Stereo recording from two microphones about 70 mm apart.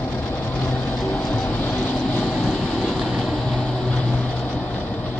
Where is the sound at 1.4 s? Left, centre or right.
Left.